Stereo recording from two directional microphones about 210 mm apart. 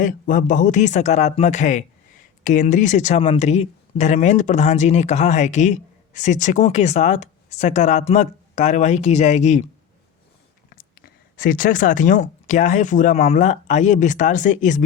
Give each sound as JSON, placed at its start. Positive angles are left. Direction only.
{"t": 0.0, "sound": "speech", "side_deg": 40}
{"t": 10.8, "sound": "speech", "side_deg": 45}